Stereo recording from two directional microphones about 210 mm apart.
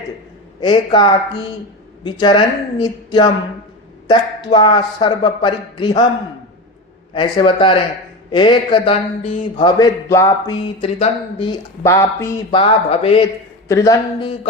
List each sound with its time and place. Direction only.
0.9 s a man's voice: 20° left (ahead or behind)
7.1 s a man's voice: 25° left (ahead or behind)
12.5 s a man's voice: 25° left (ahead or behind)
13.7 s speech: 15° left (ahead or behind)